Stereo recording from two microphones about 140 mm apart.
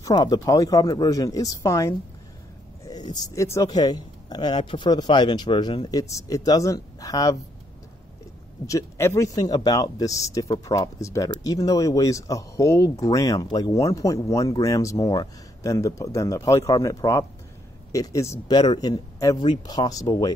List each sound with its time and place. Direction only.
0.0 s speech: 30° left (ahead or behind)
8.6 s speech: 20° left (ahead or behind)
18.5 s speech: 30° left (ahead or behind)